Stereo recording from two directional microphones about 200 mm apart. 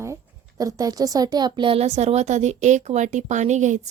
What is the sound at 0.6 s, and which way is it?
A woman's voice, 15° right (ahead or behind).